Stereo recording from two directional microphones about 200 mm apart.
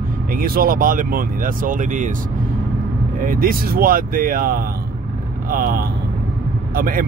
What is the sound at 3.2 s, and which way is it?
Speech, 45° right (ahead or behind).